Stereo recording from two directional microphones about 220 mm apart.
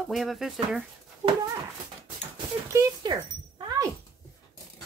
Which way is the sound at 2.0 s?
15° right (ahead or behind).